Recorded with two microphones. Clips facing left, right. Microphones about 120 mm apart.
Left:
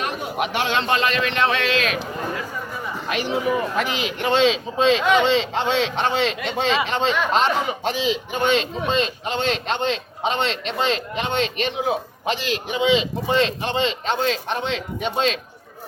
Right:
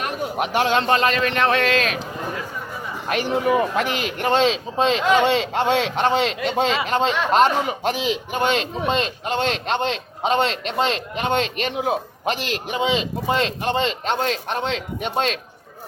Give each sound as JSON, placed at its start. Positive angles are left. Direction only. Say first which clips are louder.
{"t": 0.0, "sound": "speech", "louder": "right 1 dB", "side_deg": -40}
{"t": 3.1, "sound": "a man's voice", "louder": "right 3 dB", "side_deg": -50}
{"t": 5.2, "sound": "a man's voice", "louder": "right 1 dB", "side_deg": -55}